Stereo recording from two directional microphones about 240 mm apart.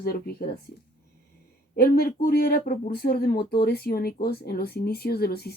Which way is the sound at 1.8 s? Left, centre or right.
Left.